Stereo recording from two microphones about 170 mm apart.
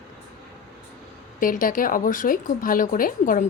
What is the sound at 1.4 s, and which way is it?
A woman's voice, 55° left (ahead or behind).